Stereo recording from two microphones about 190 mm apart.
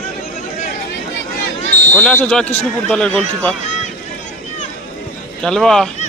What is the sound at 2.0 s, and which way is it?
Speech, 5° left (ahead or behind).